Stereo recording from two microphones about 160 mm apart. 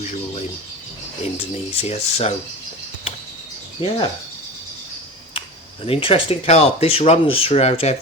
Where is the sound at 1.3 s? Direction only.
40° left (ahead or behind).